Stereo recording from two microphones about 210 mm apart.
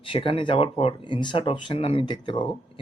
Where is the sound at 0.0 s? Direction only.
25° left (ahead or behind).